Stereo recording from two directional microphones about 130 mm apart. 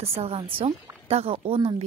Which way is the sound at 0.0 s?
50° right (ahead or behind).